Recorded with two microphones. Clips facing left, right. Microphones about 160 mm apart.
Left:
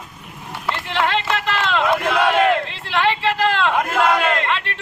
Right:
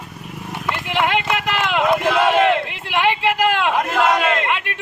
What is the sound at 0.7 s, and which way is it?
A man's voice, 15° right (ahead or behind).